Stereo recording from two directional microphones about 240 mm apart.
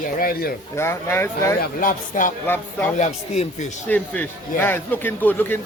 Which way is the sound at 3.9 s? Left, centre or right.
Centre.